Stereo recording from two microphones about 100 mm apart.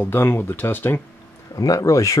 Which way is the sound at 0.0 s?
20° left (ahead or behind).